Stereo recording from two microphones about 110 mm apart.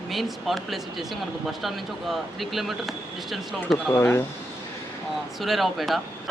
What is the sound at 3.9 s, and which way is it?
Speech, 25° left (ahead or behind).